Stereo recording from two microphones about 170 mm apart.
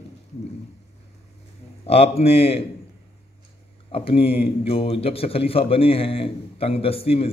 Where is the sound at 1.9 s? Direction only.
35° left (ahead or behind).